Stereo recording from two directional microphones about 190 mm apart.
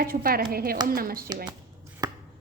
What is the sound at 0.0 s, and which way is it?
A woman's voice, 50° right (ahead or behind).